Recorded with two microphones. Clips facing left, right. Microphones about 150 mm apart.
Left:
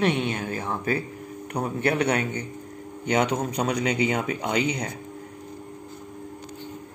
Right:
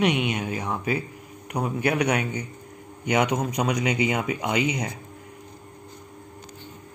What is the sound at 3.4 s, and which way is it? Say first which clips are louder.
Speech: even; 30° left (ahead or behind).